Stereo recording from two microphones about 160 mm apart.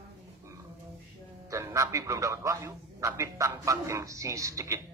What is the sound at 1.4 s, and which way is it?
A man's voice, 20° right (ahead or behind).